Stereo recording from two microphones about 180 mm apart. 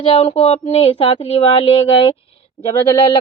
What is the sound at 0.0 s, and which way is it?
A woman's voice, 30° left (ahead or behind).